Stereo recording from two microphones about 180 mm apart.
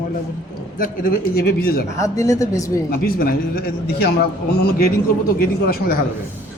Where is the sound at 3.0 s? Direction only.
55° left (ahead or behind).